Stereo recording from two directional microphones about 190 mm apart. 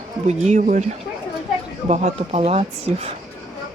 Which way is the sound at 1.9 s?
35° right (ahead or behind).